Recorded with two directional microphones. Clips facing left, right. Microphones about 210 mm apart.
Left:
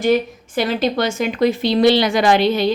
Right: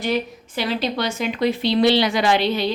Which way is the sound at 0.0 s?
45° left (ahead or behind).